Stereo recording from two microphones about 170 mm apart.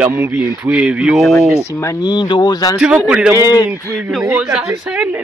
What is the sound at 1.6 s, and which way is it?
Speech, 15° left (ahead or behind).